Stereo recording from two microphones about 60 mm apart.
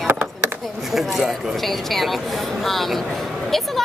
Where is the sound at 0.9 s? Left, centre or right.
Centre.